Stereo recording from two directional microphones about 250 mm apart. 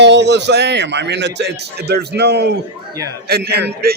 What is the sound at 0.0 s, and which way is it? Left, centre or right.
A man's voice, right.